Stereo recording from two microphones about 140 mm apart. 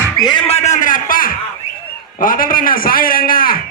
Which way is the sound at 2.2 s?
85° left.